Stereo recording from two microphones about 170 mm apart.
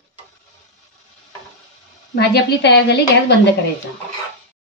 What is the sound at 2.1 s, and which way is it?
A woman's voice, 75° left (ahead or behind).